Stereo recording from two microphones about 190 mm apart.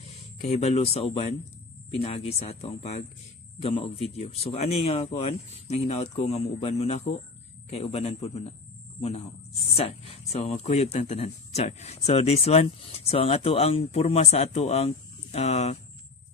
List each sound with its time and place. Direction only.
0.0 s speech: 35° left (ahead or behind)